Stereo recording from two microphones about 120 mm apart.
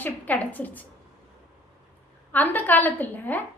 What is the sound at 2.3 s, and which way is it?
A woman's voice, 15° left (ahead or behind).